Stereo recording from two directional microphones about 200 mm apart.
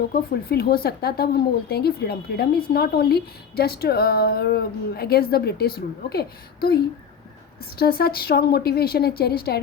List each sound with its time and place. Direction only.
0.1 s speech: 50° left (ahead or behind)
7.8 s speech: 50° left (ahead or behind)